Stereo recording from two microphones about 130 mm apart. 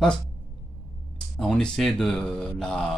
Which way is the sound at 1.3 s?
5° left (ahead or behind).